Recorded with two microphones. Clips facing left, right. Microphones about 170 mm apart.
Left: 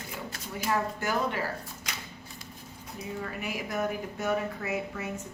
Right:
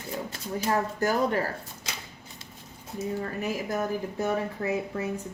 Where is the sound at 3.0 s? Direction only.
35° right (ahead or behind).